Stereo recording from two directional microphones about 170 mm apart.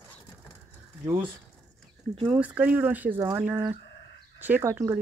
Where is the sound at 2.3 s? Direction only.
10° right (ahead or behind).